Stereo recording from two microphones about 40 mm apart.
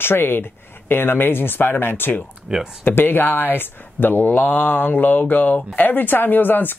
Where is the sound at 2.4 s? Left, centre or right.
Centre.